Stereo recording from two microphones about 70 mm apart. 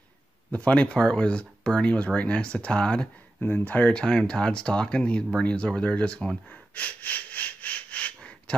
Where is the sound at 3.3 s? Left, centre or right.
Left.